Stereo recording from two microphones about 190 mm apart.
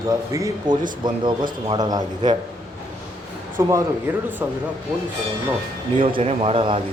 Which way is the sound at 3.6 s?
15° right (ahead or behind).